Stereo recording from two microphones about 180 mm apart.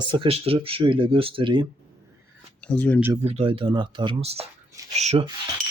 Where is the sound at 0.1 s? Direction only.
30° right (ahead or behind).